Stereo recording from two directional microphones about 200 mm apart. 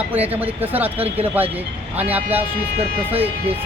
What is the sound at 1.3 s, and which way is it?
Speech, 10° right (ahead or behind).